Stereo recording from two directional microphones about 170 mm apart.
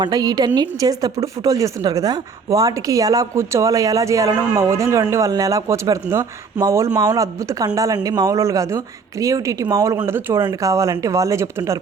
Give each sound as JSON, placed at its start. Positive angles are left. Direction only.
{"t": 0.0, "sound": "a woman's voice", "side_deg": -25}